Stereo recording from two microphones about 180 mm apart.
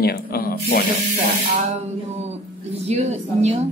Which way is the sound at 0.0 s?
60° left (ahead or behind).